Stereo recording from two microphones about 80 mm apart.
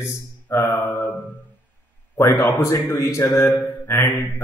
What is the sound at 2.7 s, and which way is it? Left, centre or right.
Speech, left.